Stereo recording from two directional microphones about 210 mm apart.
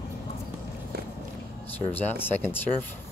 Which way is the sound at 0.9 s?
45° right (ahead or behind).